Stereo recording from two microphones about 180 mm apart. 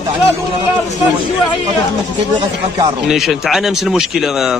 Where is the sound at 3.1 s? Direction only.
Centre (ahead or behind).